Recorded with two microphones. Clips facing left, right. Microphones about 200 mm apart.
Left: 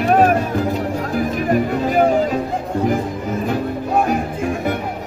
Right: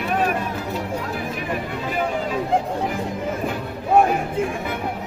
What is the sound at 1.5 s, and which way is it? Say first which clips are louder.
Music: left 11 dB; 45° left (ahead or behind).